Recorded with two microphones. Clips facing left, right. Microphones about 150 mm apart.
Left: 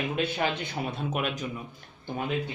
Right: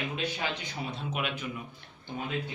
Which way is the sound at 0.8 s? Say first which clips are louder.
Left 4 dB; 50° left (ahead or behind).